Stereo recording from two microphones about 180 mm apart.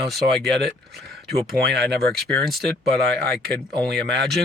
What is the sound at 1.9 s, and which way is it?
Speech, centre (ahead or behind).